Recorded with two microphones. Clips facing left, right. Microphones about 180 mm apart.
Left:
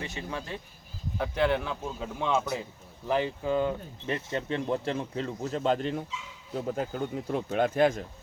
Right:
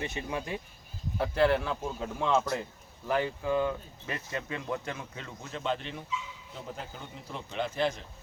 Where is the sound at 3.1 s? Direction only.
20° left (ahead or behind).